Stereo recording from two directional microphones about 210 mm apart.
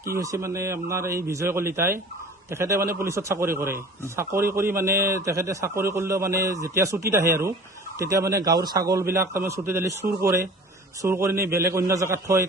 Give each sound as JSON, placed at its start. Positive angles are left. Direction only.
{"t": 0.0, "sound": "a man's voice", "side_deg": -15}
{"t": 11.0, "sound": "a man's voice", "side_deg": -10}